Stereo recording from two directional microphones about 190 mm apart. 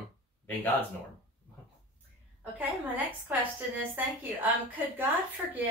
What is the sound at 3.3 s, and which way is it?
A woman's voice, 10° right (ahead or behind).